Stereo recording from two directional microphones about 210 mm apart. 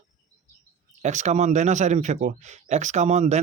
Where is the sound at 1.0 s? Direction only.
35° right (ahead or behind).